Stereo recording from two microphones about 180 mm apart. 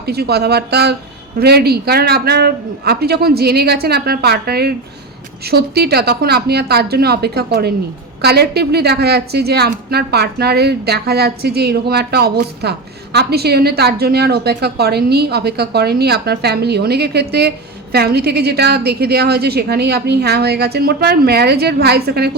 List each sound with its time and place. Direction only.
0.0 s a woman's voice: 60° right (ahead or behind)